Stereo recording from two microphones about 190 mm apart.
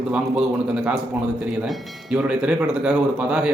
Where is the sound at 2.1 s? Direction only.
5° right (ahead or behind).